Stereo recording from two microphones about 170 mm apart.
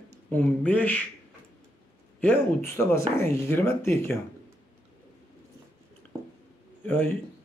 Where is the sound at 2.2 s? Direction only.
15° left (ahead or behind).